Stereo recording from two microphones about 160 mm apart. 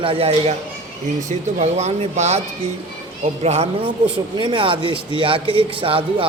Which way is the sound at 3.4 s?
40° right (ahead or behind).